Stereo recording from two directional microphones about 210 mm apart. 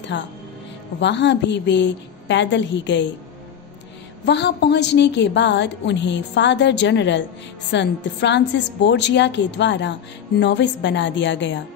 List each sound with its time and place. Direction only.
0.1 s a woman's voice: 60° left (ahead or behind)
4.3 s a woman's voice: 55° left (ahead or behind)